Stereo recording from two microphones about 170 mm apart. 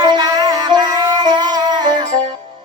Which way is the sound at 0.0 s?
25° right (ahead or behind).